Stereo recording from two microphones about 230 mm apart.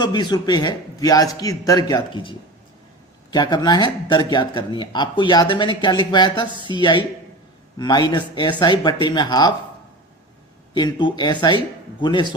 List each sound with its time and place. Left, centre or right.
0.0 s a man's voice: centre
3.3 s speech: centre
10.8 s speech: centre